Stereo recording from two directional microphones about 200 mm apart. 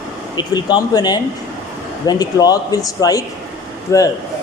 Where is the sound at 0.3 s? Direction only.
20° left (ahead or behind).